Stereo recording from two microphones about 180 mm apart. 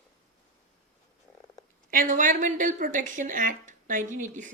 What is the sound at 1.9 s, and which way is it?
A woman's voice, 50° right (ahead or behind).